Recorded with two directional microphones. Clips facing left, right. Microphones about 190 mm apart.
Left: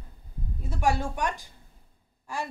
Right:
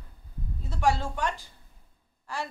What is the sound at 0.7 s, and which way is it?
A woman's voice, 15° left (ahead or behind).